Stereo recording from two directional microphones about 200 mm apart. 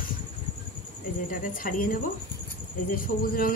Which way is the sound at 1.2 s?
45° left (ahead or behind).